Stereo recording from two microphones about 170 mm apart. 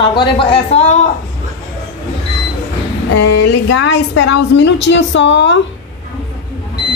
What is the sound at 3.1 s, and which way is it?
A woman's voice, 90° left.